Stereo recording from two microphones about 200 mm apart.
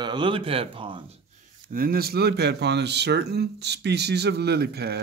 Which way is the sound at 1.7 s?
45° right (ahead or behind).